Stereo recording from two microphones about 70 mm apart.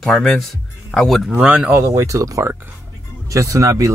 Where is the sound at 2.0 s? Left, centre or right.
Right.